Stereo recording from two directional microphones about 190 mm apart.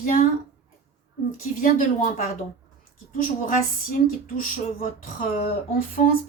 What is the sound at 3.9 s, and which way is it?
A woman's voice, 45° left (ahead or behind).